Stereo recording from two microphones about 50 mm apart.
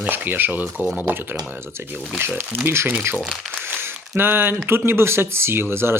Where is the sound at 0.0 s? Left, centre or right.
Right.